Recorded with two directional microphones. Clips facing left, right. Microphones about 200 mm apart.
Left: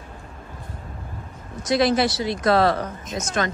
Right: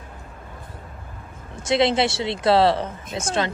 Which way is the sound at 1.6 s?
25° right (ahead or behind).